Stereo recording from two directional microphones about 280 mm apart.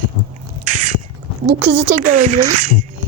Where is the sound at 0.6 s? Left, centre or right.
Right.